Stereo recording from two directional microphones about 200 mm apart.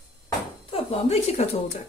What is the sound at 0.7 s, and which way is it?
Speech, 30° left (ahead or behind).